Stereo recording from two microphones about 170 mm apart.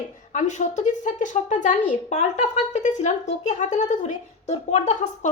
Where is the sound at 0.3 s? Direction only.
45° left (ahead or behind).